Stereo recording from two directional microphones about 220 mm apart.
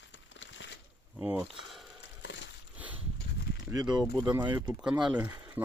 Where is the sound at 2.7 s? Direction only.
5° right (ahead or behind).